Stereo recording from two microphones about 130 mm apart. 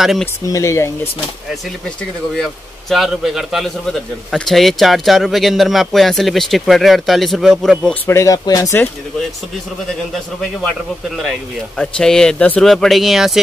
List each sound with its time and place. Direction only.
0.5 s speech: 25° left (ahead or behind)
2.3 s a man's voice: centre (ahead or behind)
7.9 s speech: 20° left (ahead or behind)
11.8 s a man's voice: 5° left (ahead or behind)